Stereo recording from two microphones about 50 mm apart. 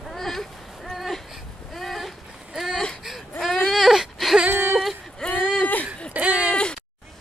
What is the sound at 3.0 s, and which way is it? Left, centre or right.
Whimper, centre.